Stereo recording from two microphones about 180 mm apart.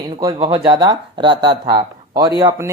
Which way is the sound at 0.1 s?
20° right (ahead or behind).